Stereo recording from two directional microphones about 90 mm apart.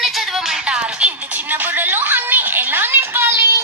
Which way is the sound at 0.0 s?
5° right (ahead or behind).